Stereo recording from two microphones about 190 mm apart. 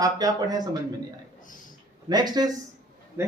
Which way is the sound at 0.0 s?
20° right (ahead or behind).